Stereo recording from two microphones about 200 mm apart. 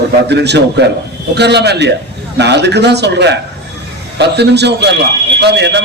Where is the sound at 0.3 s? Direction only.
60° right (ahead or behind).